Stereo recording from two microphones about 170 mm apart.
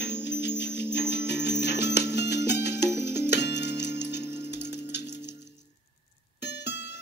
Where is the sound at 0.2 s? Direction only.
90° left.